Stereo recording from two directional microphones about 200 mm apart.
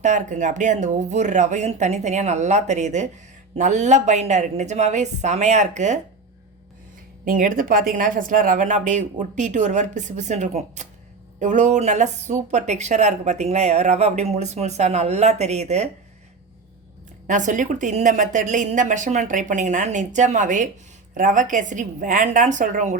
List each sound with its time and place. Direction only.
0.0 s speech: 35° right (ahead or behind)
7.3 s speech: 45° right (ahead or behind)
17.2 s speech: 40° right (ahead or behind)